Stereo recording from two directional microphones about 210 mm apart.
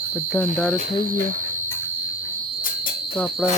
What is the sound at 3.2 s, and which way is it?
Speech, centre (ahead or behind).